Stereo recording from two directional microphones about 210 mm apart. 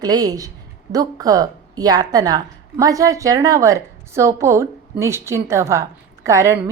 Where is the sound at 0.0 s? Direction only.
20° right (ahead or behind).